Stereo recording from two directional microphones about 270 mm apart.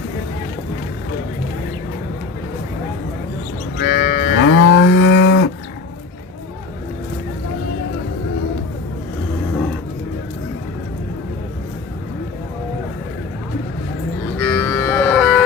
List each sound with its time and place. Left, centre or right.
3.8 s cattle: left
4.4 s cattle: left
14.3 s music: centre